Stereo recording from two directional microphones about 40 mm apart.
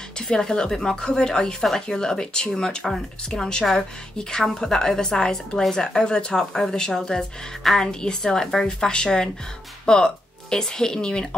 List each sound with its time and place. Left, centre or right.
0.3 s speech: centre